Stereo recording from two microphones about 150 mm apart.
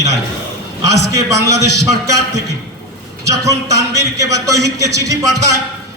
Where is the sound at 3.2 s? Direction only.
20° right (ahead or behind).